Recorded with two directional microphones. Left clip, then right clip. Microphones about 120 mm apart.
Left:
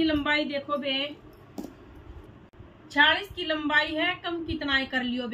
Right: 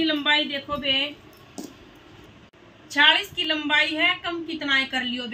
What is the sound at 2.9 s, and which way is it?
A woman's voice, 10° left (ahead or behind).